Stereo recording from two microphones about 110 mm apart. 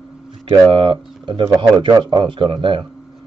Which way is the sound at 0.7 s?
50° right (ahead or behind).